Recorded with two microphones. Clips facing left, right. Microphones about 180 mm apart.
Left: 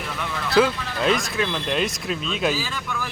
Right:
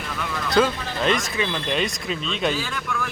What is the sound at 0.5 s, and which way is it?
Speech, centre (ahead or behind).